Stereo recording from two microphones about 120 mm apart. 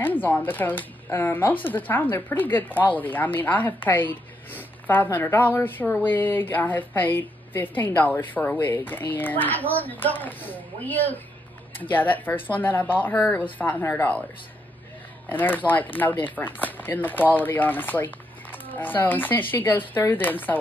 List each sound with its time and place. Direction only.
0.0 s speech: 15° left (ahead or behind)
15.2 s speech: 15° left (ahead or behind)